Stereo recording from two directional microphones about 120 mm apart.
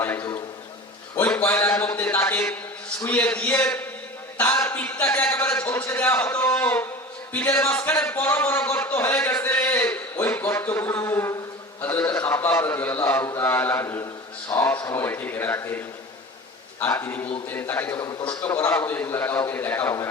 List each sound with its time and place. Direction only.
0.0 s a sound: 20° left (ahead or behind)
3.0 s a man's voice: 15° left (ahead or behind)
7.3 s a sound: 15° left (ahead or behind)
11.8 s a man's voice: 15° left (ahead or behind)
14.5 s a sound: 20° left (ahead or behind)
14.8 s a man's voice: 25° left (ahead or behind)
16.8 s a man's voice: 20° left (ahead or behind)
17.9 s a man's voice: 35° left (ahead or behind)
18.4 s a man's voice: 15° left (ahead or behind)